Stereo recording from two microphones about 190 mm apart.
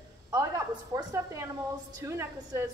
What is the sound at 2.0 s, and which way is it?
Speech, 15° right (ahead or behind).